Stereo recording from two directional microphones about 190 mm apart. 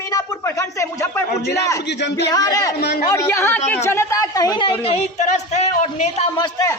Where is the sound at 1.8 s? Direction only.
65° left (ahead or behind).